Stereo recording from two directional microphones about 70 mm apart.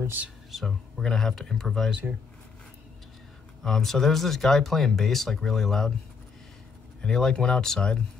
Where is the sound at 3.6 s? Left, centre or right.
Centre.